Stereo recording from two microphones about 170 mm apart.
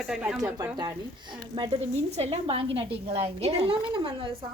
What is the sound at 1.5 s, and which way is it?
A woman's voice, 30° right (ahead or behind).